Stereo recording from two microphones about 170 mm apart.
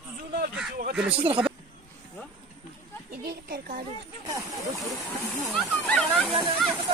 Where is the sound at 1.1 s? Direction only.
35° right (ahead or behind).